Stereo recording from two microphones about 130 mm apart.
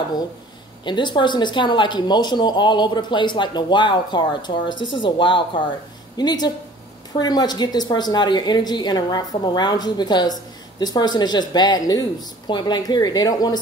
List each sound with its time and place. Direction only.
0.8 s a woman's voice: 35° left (ahead or behind)